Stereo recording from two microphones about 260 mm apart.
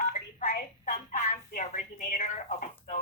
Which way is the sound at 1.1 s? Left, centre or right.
Left.